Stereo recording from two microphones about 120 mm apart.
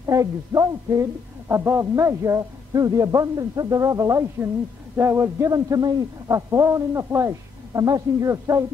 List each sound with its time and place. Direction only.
0.0 s a man's voice: 30° right (ahead or behind)